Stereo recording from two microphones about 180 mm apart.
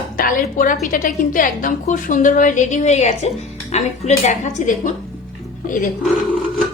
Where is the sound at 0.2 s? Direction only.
50° left (ahead or behind).